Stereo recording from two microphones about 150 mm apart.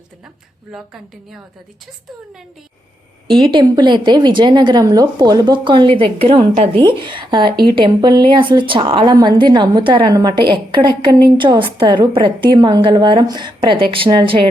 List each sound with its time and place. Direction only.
3.2 s a woman's voice: 30° right (ahead or behind)